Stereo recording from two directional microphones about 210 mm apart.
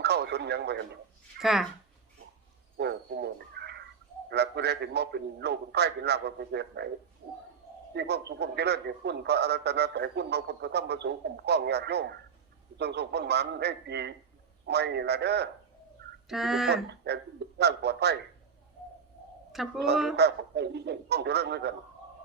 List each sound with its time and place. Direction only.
0.0 s speech: 50° right (ahead or behind)
1.4 s speech: centre (ahead or behind)
2.7 s a sound: 55° right (ahead or behind)
4.3 s a man's voice: 50° right (ahead or behind)
7.9 s a man's voice: 50° right (ahead or behind)
16.3 s speech: centre (ahead or behind)
16.6 s a man's voice: 50° right (ahead or behind)
19.5 s speech: centre (ahead or behind)
20.1 s a man's voice: 50° right (ahead or behind)